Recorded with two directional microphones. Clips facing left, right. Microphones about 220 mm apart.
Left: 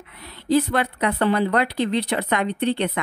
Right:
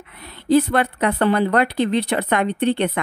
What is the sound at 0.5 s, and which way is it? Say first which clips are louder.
Speech: right 3 dB; 55° right (ahead or behind).